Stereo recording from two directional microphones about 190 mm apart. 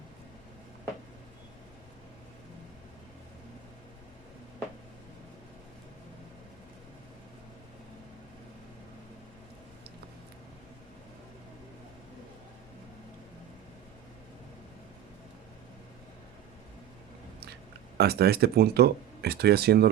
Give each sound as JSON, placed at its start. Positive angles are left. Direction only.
{"t": 17.9, "sound": "speech", "side_deg": -55}